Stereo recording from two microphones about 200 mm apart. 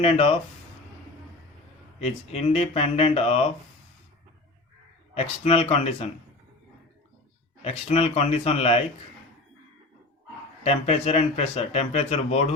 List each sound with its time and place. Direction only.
0.0 s speech: 30° left (ahead or behind)
2.0 s speech: 30° left (ahead or behind)
5.1 s speech: 30° left (ahead or behind)
7.6 s speech: 30° left (ahead or behind)
10.6 s speech: 30° left (ahead or behind)